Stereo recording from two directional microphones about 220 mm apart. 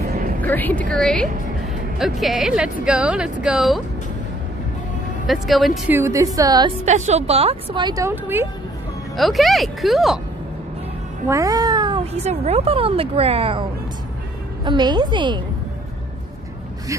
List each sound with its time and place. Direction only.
0.0 s music: 45° right (ahead or behind)
0.4 s a woman's voice: 10° left (ahead or behind)
5.2 s speech: centre (ahead or behind)
5.9 s a woman's voice: 15° right (ahead or behind)
6.8 s speech: 30° right (ahead or behind); by 8.5 s 10° right (ahead or behind)
9.1 s speech: centre (ahead or behind)
11.2 s speech: 15° right (ahead or behind)